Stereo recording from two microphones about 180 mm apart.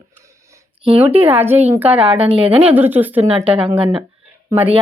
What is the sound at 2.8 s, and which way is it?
Speech, 10° right (ahead or behind).